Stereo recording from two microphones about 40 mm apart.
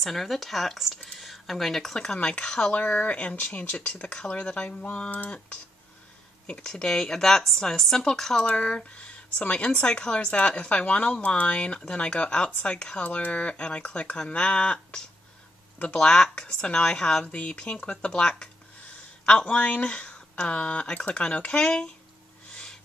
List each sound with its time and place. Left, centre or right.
0.0 s speech: centre
2.2 s speech: left
2.7 s speech: left
6.5 s speech: centre
8.5 s speech: left
13.0 s speech: left
16.0 s speech: left
19.2 s speech: left